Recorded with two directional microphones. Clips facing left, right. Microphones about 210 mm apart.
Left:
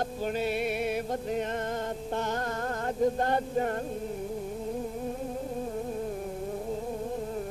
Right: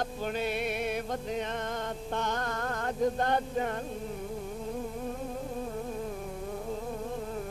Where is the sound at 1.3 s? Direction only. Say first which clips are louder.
Left 3 dB; 45° left (ahead or behind).